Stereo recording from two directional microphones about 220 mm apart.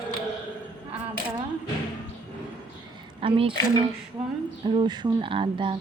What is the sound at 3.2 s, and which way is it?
Speech, 25° right (ahead or behind).